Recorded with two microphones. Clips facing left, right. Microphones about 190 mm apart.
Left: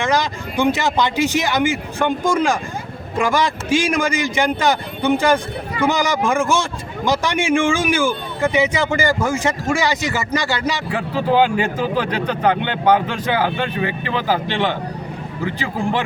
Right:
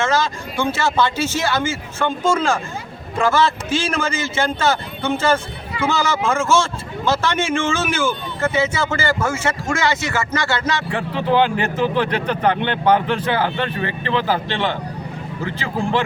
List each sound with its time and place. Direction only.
0.0 s a man's voice: 15° left (ahead or behind)